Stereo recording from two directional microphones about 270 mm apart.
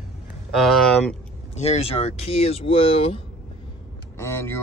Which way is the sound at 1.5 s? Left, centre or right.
Left.